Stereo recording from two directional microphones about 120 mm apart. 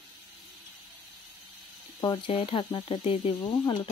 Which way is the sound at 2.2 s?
45° left (ahead or behind).